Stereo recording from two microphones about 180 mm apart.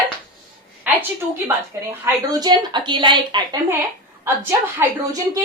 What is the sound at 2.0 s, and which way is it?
A woman's voice, 20° right (ahead or behind).